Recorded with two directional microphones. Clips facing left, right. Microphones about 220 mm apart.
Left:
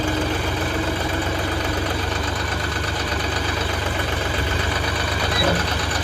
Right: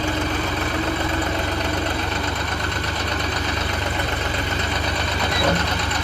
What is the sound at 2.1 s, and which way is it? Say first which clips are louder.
Engine: even; 25° right (ahead or behind).